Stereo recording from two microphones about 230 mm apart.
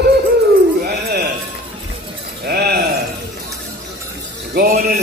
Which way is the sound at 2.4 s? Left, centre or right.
Right.